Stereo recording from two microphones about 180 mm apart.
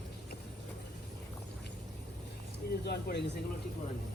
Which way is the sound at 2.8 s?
65° left (ahead or behind).